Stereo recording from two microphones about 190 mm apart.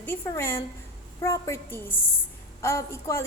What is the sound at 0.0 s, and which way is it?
A woman's voice, 10° left (ahead or behind).